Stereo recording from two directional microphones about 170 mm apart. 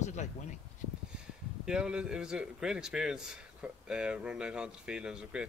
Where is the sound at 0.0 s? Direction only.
45° left (ahead or behind).